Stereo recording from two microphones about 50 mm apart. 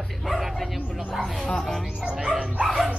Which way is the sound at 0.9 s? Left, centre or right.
Centre.